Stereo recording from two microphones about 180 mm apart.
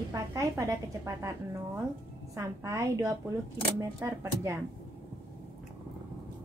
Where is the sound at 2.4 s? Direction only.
15° right (ahead or behind).